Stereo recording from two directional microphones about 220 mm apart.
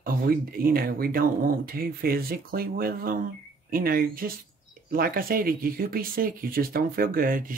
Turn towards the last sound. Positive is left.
turn(degrees=-40)  # may be behind; listen again after turning